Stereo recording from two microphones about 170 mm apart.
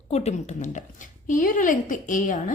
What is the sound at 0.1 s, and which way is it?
Speech, 40° left (ahead or behind).